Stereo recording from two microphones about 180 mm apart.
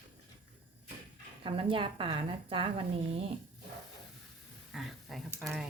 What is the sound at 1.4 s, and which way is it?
A woman's voice, 30° right (ahead or behind).